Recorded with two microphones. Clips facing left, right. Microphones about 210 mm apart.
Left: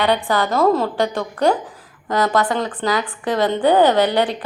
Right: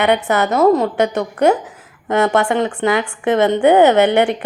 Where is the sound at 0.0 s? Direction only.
20° right (ahead or behind).